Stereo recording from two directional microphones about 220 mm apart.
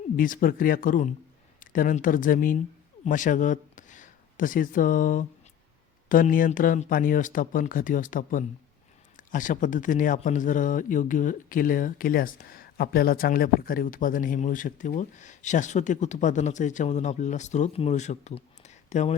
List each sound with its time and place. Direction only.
0.2 s speech: 40° left (ahead or behind)